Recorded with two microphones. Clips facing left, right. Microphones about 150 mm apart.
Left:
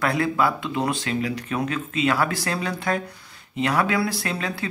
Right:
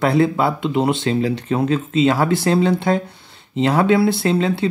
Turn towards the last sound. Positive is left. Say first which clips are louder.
# right 10 dB
turn(degrees=-25)  # may be behind; listen again after turning